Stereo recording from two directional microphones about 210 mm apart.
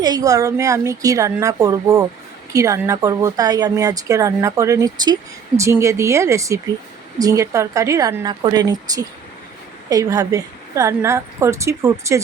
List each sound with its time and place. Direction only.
0.0 s a woman's voice: 15° right (ahead or behind)